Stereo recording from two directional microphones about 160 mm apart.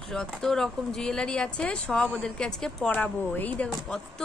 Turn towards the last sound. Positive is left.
turn(degrees=5)  # may be behind; listen again after turning